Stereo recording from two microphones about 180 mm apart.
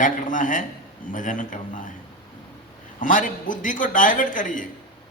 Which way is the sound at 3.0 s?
45° left (ahead or behind).